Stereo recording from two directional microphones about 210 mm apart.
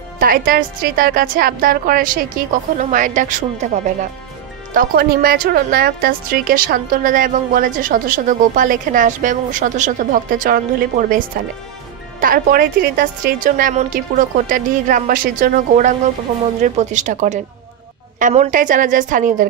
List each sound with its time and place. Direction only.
0.2 s a woman's voice: 40° right (ahead or behind)